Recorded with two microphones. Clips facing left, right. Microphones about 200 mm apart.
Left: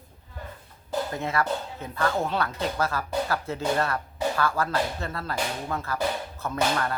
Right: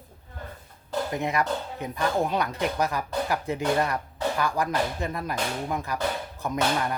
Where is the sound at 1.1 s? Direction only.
15° right (ahead or behind).